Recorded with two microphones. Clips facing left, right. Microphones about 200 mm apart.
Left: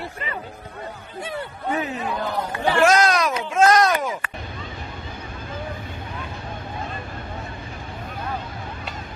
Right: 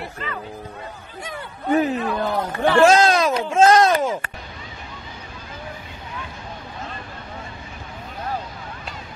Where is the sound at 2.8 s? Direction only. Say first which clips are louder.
Right 3 dB; 25° right (ahead or behind).